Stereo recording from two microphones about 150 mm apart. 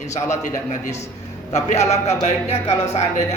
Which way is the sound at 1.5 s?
50° left (ahead or behind).